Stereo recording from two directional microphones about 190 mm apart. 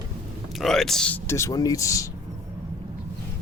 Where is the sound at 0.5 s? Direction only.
Centre (ahead or behind); by 2.1 s 15° left (ahead or behind).